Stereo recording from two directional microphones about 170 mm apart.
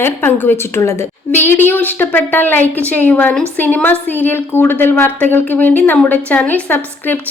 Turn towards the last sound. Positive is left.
turn(degrees=10)  # may be behind; listen again after turning